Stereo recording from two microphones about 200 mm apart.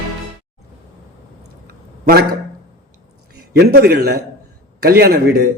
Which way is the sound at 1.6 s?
50° right (ahead or behind).